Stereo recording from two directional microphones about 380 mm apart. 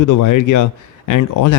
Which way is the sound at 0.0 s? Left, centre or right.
Left.